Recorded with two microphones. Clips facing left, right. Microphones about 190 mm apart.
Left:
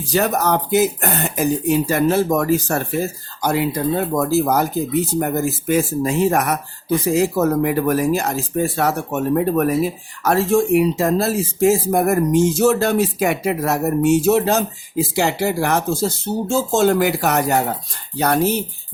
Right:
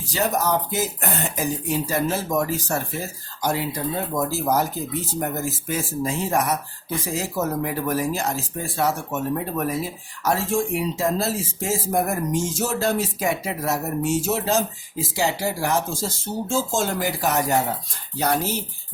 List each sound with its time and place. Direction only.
0.1 s speech: 60° left (ahead or behind)